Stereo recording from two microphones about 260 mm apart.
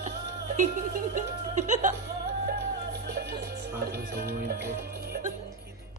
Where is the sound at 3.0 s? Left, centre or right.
Right.